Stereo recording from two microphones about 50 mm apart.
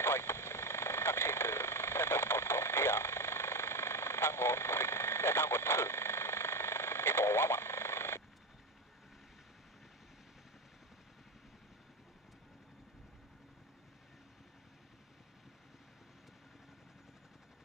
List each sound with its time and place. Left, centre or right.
0.0 s vehicle: left